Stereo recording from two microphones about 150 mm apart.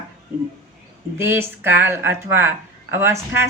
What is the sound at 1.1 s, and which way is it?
Speech, 15° right (ahead or behind).